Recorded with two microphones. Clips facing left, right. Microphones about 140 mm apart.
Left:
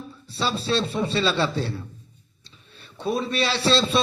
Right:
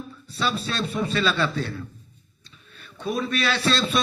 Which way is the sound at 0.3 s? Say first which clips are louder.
Left 2 dB; 30° left (ahead or behind).